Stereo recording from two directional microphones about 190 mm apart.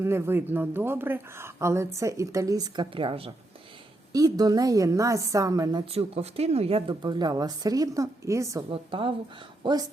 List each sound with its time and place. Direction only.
0.0 s a woman's voice: 15° right (ahead or behind); by 3.3 s 30° right (ahead or behind)
4.1 s a woman's voice: 20° right (ahead or behind)
8.7 s a woman's voice: 25° right (ahead or behind)